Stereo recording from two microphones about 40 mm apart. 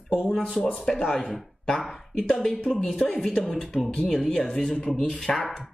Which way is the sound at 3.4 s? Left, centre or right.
Centre.